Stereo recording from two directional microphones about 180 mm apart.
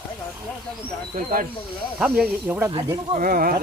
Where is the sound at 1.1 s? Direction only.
50° right (ahead or behind).